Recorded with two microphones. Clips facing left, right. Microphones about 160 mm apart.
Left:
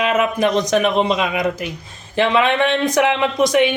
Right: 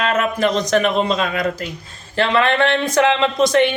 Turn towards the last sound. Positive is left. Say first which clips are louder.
# even
turn(degrees=15)  # may be behind; listen again after turning